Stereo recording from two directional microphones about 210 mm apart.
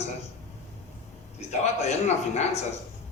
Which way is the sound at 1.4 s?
30° left (ahead or behind).